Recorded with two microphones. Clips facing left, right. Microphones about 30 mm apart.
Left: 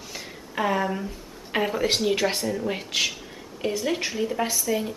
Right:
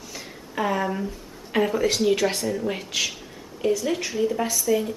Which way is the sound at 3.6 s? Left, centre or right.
Centre.